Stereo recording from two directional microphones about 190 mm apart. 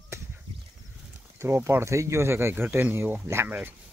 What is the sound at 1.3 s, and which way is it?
Speech, 15° right (ahead or behind).